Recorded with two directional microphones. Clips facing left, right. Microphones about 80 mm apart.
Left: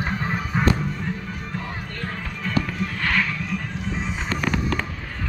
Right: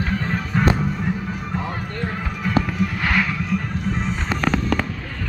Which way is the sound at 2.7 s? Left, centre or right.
Centre.